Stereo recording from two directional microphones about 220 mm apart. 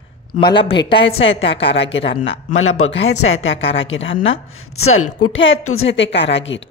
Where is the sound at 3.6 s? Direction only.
25° left (ahead or behind).